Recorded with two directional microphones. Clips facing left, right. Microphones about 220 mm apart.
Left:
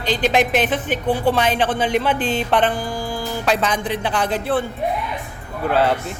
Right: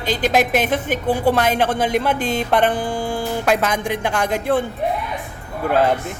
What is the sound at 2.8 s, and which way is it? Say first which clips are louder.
Music: right 3 dB; 25° right (ahead or behind).